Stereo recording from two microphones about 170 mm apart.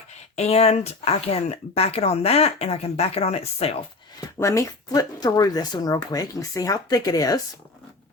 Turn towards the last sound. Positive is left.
turn(degrees=20)  # may be behind; listen again after turning